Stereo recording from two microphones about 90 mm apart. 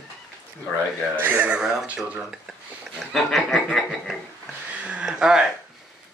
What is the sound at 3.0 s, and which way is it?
Speech, centre (ahead or behind).